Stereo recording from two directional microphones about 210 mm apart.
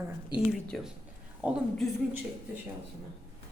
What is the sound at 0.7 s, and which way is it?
Speech, centre (ahead or behind).